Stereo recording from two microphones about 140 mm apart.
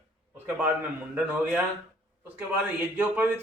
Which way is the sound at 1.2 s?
10° right (ahead or behind).